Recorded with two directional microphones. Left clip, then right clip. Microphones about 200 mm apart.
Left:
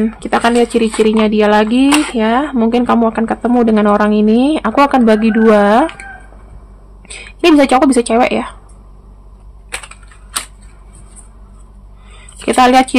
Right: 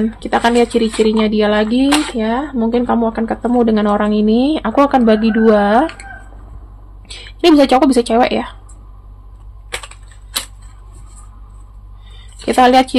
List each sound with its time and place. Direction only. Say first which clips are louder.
0.0 s a woman's voice: left 1 dB; 15° left (ahead or behind)
7.1 s a woman's voice: left 1 dB; 15° left (ahead or behind)
12.4 s a woman's voice: left 1 dB; 15° left (ahead or behind)